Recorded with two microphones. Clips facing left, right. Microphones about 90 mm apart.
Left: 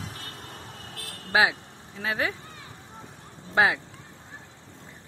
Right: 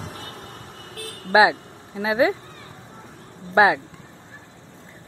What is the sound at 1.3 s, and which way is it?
Speech, 20° right (ahead or behind).